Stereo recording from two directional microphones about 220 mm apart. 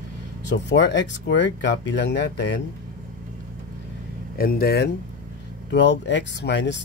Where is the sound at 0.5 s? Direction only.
55° left (ahead or behind).